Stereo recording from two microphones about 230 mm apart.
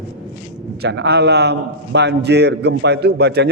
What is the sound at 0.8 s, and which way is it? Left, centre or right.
A man's voice, right.